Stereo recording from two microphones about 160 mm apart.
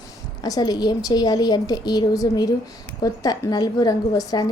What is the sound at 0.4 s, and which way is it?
A woman's voice, 25° left (ahead or behind).